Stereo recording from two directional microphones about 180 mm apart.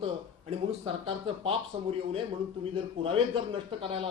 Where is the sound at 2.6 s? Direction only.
30° right (ahead or behind).